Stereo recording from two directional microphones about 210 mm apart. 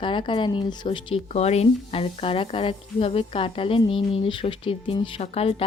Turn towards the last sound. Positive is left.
turn(degrees=30)  # may be behind; listen again after turning